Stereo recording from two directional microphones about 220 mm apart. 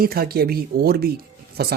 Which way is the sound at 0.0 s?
45° right (ahead or behind).